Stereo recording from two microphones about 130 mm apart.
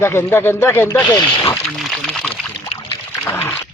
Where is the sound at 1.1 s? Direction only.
35° left (ahead or behind).